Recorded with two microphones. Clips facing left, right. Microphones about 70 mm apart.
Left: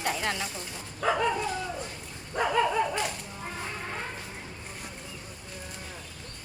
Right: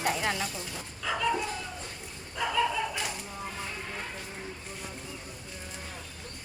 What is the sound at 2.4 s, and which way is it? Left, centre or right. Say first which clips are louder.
Speech: left 4 dB; left.